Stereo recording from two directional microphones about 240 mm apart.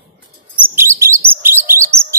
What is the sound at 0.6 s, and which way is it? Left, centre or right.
Chirp, centre.